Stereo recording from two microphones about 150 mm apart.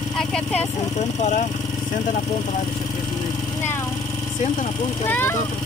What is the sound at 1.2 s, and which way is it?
Speech, 55° left (ahead or behind).